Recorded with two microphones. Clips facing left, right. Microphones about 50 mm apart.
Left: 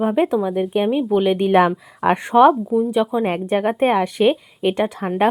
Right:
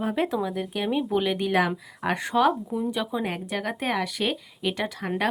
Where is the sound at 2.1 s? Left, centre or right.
Left.